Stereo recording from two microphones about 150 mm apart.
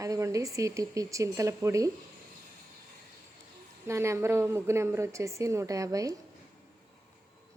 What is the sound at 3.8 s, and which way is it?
Speech, 20° right (ahead or behind).